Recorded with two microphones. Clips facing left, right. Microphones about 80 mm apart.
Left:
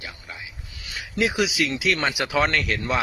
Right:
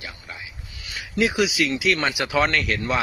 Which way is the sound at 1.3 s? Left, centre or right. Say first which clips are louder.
Right 2 dB; left.